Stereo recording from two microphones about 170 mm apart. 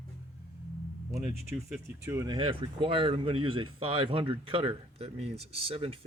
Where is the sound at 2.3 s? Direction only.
30° right (ahead or behind).